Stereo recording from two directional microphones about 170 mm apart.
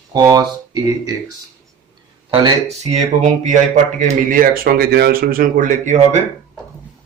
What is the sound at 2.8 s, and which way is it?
Speech, 40° right (ahead or behind).